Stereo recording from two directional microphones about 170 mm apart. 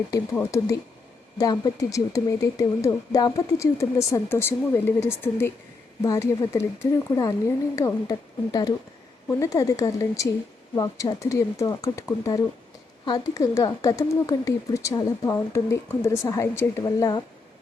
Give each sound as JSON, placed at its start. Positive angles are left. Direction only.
{"t": 0.1, "sound": "speech", "side_deg": 20}
{"t": 9.3, "sound": "speech", "side_deg": 20}